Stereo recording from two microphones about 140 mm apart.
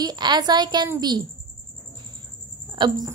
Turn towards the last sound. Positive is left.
turn(degrees=-30)  # may be behind; listen again after turning